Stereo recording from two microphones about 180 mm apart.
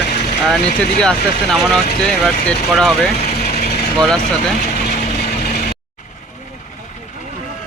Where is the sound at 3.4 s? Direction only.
60° left (ahead or behind).